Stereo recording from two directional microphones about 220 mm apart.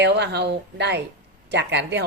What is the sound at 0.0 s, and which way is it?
A woman's voice, 50° right (ahead or behind).